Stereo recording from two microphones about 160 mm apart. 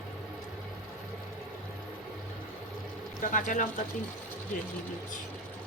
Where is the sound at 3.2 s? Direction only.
55° left (ahead or behind).